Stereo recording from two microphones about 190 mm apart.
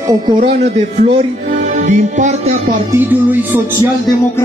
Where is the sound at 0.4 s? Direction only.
40° right (ahead or behind).